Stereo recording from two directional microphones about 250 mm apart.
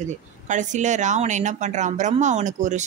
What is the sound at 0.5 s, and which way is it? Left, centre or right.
A woman's voice, right.